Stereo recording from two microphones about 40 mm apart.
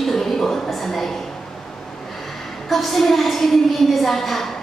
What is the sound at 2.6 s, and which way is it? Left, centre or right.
A woman's voice, centre.